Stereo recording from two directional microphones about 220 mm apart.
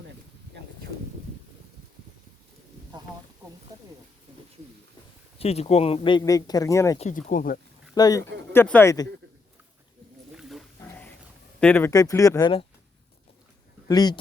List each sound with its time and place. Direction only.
3.7 s a sound: 15° right (ahead or behind)
5.4 s speech: 30° left (ahead or behind)
7.0 s speech: 35° left (ahead or behind)
7.9 s speech: 15° left (ahead or behind)
10.3 s wild animals: 5° left (ahead or behind)
11.6 s speech: 10° left (ahead or behind)
13.8 s speech: 20° left (ahead or behind)